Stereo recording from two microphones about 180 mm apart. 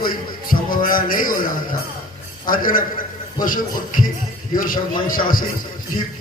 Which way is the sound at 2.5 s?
50° left (ahead or behind).